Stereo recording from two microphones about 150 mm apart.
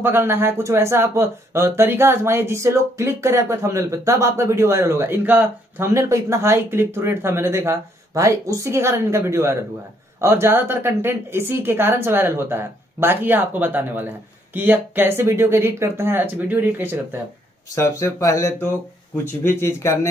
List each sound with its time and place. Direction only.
0.0 s speech: 15° right (ahead or behind)
17.7 s speech: 20° left (ahead or behind)